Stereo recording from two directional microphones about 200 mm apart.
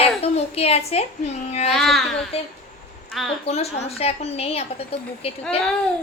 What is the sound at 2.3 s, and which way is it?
A woman's voice, 30° left (ahead or behind).